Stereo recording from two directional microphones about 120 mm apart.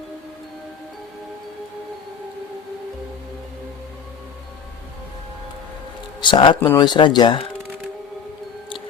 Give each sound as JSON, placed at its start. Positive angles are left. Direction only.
{"t": 6.2, "sound": "speech", "side_deg": 40}